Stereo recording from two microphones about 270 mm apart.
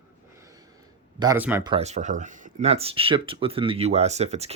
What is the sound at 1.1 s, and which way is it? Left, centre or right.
Speech, centre.